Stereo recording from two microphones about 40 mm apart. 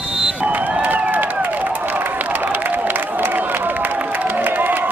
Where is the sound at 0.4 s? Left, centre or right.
Right.